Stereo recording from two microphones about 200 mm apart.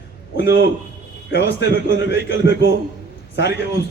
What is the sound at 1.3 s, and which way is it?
Speech, 60° left (ahead or behind).